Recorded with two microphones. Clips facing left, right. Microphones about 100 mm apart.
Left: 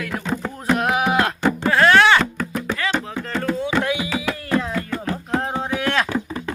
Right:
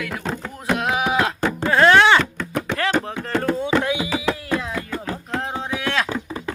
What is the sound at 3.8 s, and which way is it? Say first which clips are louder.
Music: right 1 dB; 20° right (ahead or behind).